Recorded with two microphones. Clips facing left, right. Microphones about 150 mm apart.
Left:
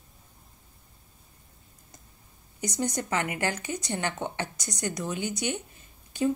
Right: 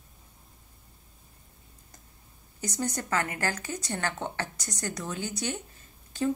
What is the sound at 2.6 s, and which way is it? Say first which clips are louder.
Speech: left 2 dB; 15° left (ahead or behind).